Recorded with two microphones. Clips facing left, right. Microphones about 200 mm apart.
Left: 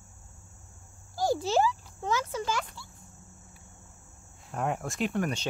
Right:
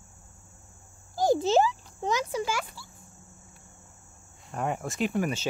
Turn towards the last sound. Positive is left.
turn(degrees=-5)  # may be behind; listen again after turning